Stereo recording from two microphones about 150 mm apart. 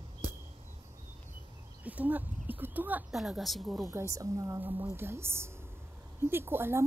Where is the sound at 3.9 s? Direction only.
20° right (ahead or behind).